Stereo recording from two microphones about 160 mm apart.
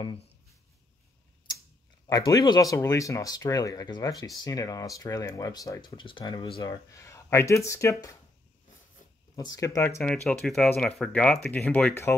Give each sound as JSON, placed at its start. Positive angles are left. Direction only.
{"t": 2.0, "sound": "speech", "side_deg": 20}
{"t": 9.3, "sound": "speech", "side_deg": 25}
{"t": 9.8, "sound": "speech", "side_deg": 5}